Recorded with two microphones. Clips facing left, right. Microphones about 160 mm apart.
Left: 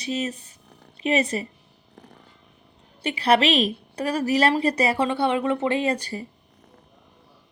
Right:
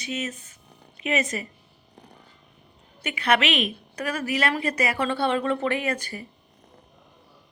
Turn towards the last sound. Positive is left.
turn(degrees=30)  # may be behind; listen again after turning